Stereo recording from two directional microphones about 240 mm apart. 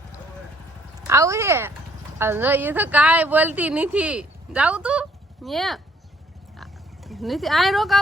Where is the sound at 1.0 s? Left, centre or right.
Centre.